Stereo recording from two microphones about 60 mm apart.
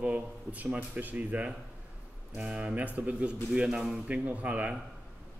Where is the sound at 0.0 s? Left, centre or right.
Right.